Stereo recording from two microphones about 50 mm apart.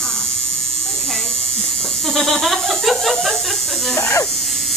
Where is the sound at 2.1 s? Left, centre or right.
Centre.